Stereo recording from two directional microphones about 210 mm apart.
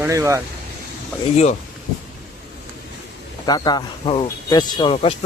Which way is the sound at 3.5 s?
20° left (ahead or behind).